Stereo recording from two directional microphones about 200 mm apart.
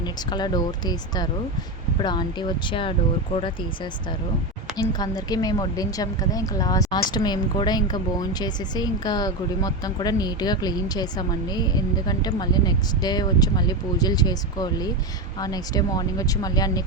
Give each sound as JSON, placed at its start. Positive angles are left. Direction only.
{"t": 0.0, "sound": "speech", "side_deg": 20}
{"t": 4.8, "sound": "speech", "side_deg": 20}